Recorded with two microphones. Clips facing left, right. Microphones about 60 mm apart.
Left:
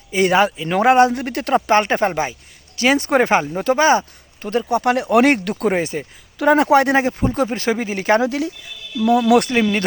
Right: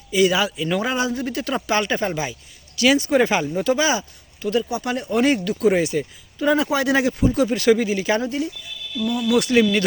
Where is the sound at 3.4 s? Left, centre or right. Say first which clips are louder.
Even; left.